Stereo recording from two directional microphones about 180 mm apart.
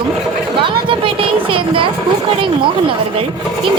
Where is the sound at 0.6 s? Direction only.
30° right (ahead or behind).